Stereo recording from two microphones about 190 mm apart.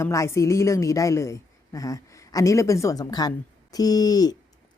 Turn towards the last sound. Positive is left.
turn(degrees=20)  # may be behind; listen again after turning